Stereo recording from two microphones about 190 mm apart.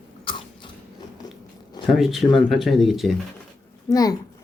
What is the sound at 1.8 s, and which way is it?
Speech, centre (ahead or behind).